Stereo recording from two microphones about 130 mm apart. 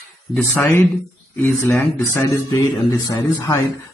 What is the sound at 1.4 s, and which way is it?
Speech, 15° left (ahead or behind).